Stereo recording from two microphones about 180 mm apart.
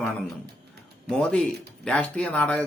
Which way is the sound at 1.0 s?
5° left (ahead or behind).